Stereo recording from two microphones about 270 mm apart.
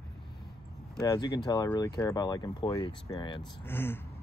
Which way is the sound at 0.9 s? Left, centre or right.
Centre.